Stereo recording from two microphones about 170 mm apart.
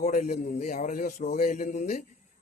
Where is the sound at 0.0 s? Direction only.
45° left (ahead or behind).